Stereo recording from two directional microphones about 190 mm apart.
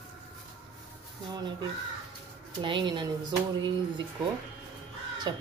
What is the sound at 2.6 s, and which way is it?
A woman's voice, 25° right (ahead or behind).